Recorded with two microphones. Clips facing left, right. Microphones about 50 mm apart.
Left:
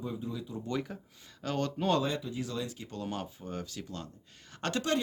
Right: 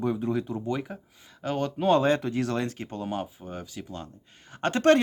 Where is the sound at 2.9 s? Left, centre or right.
Right.